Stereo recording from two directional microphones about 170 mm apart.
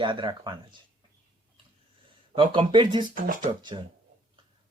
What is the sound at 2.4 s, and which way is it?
Speech, 30° right (ahead or behind).